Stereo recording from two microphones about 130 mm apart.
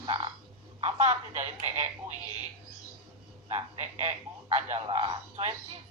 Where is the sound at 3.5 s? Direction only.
55° right (ahead or behind).